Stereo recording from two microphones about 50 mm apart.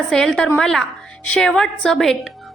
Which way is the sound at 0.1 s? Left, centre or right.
Centre.